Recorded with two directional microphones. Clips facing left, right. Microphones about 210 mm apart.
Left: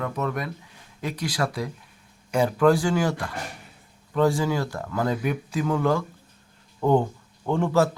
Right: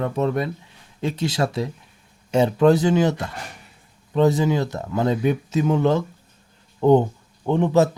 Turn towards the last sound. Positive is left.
turn(degrees=-20)  # may be behind; listen again after turning